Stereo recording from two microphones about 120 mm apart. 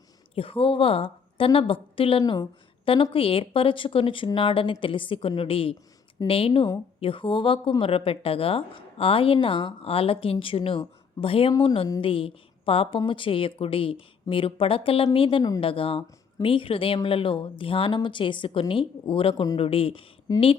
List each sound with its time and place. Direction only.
0.3 s speech: 50° left (ahead or behind)
2.2 s a woman's voice: 35° left (ahead or behind)
2.8 s speech: 45° left (ahead or behind)